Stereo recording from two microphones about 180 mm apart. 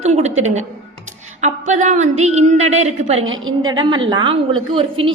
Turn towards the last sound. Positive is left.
turn(degrees=-30)  # may be behind; listen again after turning